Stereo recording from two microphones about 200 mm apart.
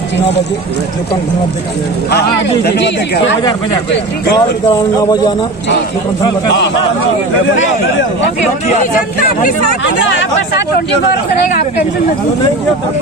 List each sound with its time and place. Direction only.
2.0 s speech: 55° left (ahead or behind)
4.6 s a man's voice: 20° left (ahead or behind)